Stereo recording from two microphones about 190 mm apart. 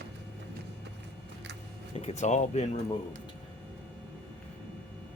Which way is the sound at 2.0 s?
35° left (ahead or behind).